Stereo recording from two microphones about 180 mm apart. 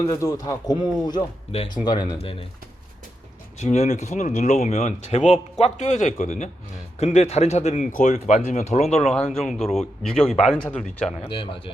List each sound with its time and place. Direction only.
0.0 s speech: 20° left (ahead or behind)
3.6 s speech: 40° left (ahead or behind)
9.4 s speech: centre (ahead or behind)
11.3 s speech: 30° left (ahead or behind)